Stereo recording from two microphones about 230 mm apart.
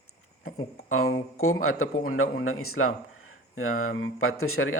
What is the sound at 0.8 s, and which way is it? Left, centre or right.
Speech, left.